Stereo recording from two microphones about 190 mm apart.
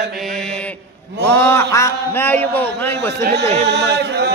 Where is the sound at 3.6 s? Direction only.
60° right (ahead or behind).